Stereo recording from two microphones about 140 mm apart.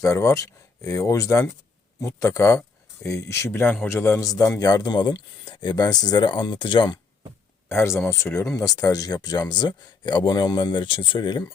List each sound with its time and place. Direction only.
0.0 s a man's voice: 20° left (ahead or behind)
7.7 s a man's voice: 20° left (ahead or behind)